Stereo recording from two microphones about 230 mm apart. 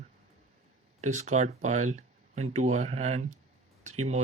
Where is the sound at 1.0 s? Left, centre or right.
Right.